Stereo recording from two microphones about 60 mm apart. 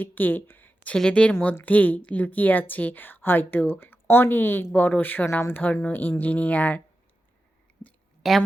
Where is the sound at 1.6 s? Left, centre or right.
Left.